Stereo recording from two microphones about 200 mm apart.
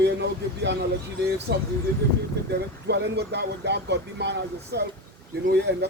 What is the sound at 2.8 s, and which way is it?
Speech, 55° right (ahead or behind).